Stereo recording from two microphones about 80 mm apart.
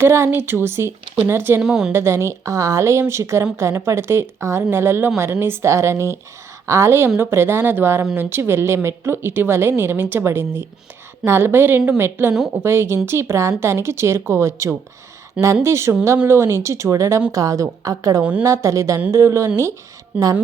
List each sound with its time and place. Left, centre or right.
0.0 s speech: right
1.6 s a woman's voice: centre
1.9 s a woman's voice: right
18.2 s a woman's voice: centre
18.4 s a woman's voice: right